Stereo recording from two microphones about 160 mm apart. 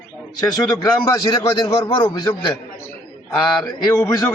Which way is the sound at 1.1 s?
25° left (ahead or behind).